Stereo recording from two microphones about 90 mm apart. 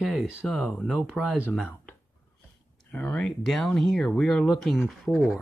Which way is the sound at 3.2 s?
5° left (ahead or behind).